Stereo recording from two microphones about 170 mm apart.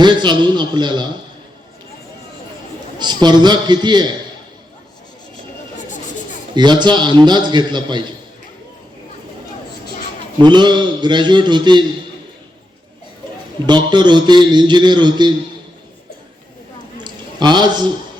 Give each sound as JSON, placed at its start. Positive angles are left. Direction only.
{"t": 0.0, "sound": "a man's voice", "side_deg": -25}
{"t": 3.0, "sound": "a man's voice", "side_deg": -25}
{"t": 6.5, "sound": "a man's voice", "side_deg": -25}
{"t": 10.4, "sound": "a man's voice", "side_deg": -25}
{"t": 13.7, "sound": "a man's voice", "side_deg": -25}
{"t": 17.0, "sound": "a sound", "side_deg": -25}